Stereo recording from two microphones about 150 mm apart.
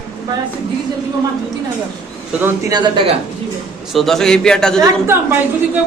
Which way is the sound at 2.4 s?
25° right (ahead or behind).